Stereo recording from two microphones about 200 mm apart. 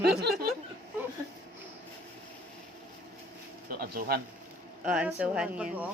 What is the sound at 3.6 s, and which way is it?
Speech, 50° right (ahead or behind).